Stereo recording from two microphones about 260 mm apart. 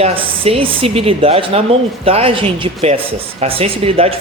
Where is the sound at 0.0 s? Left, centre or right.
Right.